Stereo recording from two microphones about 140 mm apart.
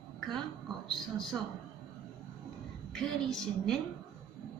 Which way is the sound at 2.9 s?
5° left (ahead or behind).